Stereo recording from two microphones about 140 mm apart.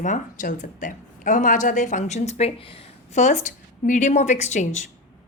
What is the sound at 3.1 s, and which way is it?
A woman's voice, 60° left (ahead or behind).